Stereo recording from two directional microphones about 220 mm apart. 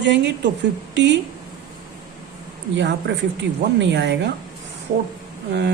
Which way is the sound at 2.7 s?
50° right (ahead or behind).